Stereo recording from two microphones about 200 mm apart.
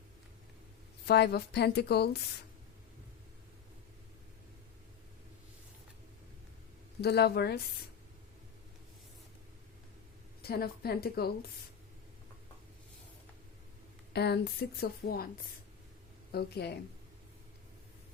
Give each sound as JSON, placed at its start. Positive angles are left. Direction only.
{"t": 1.0, "sound": "speech", "side_deg": 55}
{"t": 7.0, "sound": "speech", "side_deg": 55}
{"t": 10.4, "sound": "speech", "side_deg": 50}
{"t": 14.1, "sound": "speech", "side_deg": 55}
{"t": 16.3, "sound": "speech", "side_deg": 55}